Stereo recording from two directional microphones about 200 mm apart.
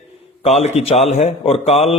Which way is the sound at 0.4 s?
30° left (ahead or behind).